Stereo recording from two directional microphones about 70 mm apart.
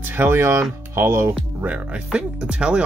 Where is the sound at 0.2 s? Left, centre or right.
Right.